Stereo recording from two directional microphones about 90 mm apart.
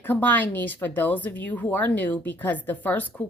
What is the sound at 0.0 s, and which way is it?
Speech, 20° left (ahead or behind).